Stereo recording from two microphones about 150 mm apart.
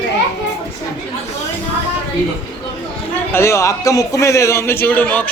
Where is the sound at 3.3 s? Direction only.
20° left (ahead or behind).